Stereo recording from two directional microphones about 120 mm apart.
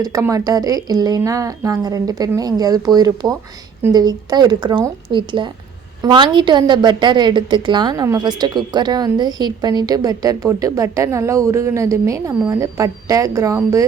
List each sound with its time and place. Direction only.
0.0 s a woman's voice: 25° right (ahead or behind)